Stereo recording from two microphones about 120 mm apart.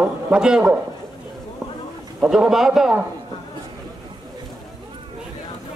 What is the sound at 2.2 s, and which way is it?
Speech, 5° right (ahead or behind).